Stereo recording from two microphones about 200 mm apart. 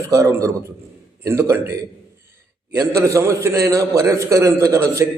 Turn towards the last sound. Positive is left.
turn(degrees=-15)  # may be behind; listen again after turning